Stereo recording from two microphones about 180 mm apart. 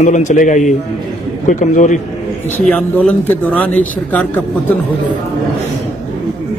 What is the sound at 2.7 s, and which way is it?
Speech, 5° left (ahead or behind).